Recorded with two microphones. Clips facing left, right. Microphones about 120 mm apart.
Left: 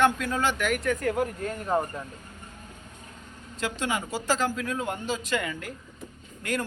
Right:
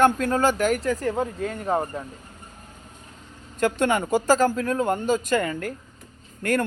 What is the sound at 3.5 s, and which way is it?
Speech, 50° right (ahead or behind).